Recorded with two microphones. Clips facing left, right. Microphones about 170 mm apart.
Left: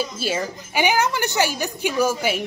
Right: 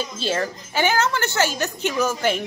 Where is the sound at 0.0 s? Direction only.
10° left (ahead or behind).